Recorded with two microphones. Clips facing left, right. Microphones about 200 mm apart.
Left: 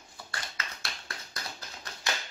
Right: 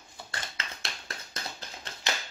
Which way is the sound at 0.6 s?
25° right (ahead or behind).